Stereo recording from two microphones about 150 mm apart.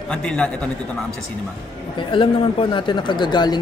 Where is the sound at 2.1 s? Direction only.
35° left (ahead or behind).